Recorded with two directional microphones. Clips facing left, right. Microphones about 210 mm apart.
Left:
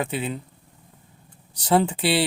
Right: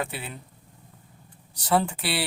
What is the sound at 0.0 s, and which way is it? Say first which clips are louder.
Speech: left 6 dB; 20° left (ahead or behind).